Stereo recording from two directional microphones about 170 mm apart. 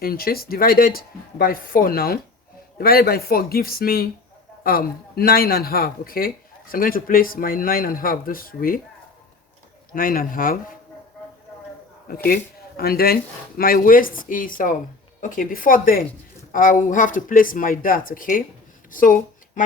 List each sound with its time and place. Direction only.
0.0 s a man's voice: 60° left (ahead or behind)
9.9 s a man's voice: 55° left (ahead or behind)
12.0 s speech: 60° left (ahead or behind)
18.9 s a sound: 50° left (ahead or behind)